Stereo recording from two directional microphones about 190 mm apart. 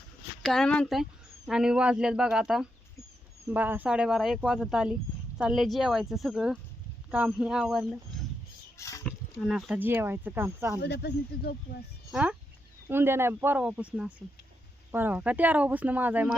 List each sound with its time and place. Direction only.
0.4 s speech: centre (ahead or behind)
8.8 s a sound: 15° left (ahead or behind)
9.0 s speech: 5° right (ahead or behind)
10.8 s speech: 60° left (ahead or behind)
12.1 s speech: 5° right (ahead or behind)